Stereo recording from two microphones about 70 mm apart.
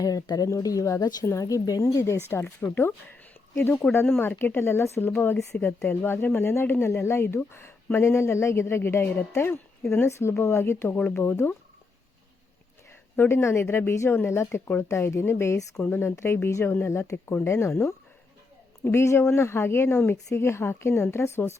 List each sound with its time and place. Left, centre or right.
0.0 s speech: left
1.2 s speech: left
2.6 s speech: left
4.0 s speech: left
11.2 s speech: left
13.1 s speech: left